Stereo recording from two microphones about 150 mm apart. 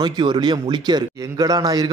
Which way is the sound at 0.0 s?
30° right (ahead or behind).